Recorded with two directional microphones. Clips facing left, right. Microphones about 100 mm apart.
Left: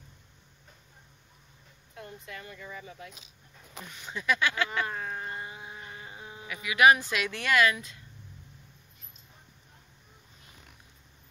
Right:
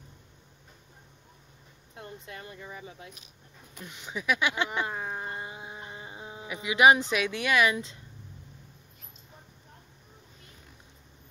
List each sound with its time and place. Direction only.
2.0 s speech: 30° right (ahead or behind)